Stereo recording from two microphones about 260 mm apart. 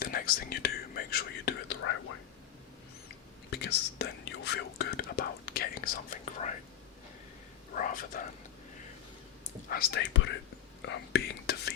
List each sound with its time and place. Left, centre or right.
0.0 s speech: left
3.5 s speech: left
7.8 s speech: left
9.6 s speech: left